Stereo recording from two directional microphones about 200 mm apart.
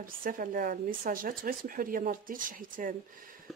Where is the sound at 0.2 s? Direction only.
45° right (ahead or behind).